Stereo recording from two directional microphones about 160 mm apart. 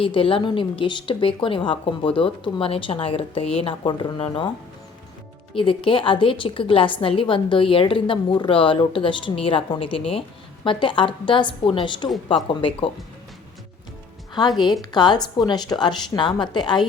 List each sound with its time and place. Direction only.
0.0 s a woman's voice: 35° left (ahead or behind)
5.5 s a woman's voice: 35° left (ahead or behind)
14.6 s a woman's voice: 25° left (ahead or behind)